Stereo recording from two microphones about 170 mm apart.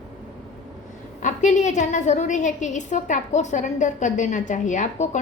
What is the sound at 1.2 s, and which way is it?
A woman's voice, 45° left (ahead or behind).